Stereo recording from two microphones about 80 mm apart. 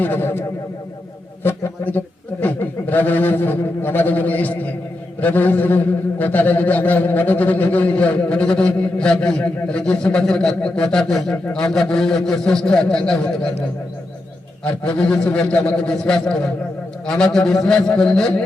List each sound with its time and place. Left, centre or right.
0.0 s a sound: left
1.5 s a man's voice: left
14.9 s a man's voice: centre